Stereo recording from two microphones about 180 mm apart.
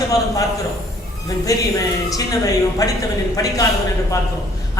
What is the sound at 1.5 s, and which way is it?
A man's voice, 20° left (ahead or behind).